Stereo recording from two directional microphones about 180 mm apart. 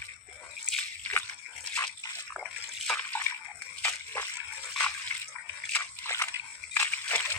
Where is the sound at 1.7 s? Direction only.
20° left (ahead or behind).